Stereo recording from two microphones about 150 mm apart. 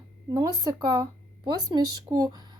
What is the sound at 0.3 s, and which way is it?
Speech, 25° right (ahead or behind).